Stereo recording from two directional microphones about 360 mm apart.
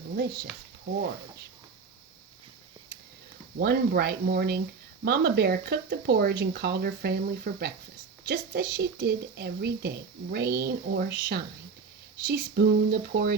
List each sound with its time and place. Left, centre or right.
0.2 s speech: right
3.6 s speech: right